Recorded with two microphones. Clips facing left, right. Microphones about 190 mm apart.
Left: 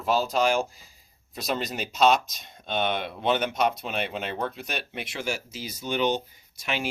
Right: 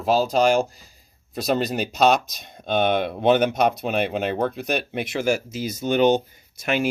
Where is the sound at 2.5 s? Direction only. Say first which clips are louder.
Right 7 dB; 50° right (ahead or behind).